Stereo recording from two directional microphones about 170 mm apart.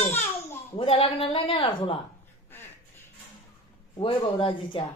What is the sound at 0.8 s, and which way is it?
A woman's voice, 30° left (ahead or behind).